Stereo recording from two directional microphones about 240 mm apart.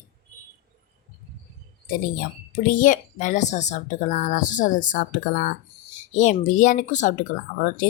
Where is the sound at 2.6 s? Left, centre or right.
Left.